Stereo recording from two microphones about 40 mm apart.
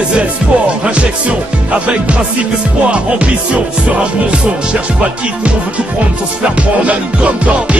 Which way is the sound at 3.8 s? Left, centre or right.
Right.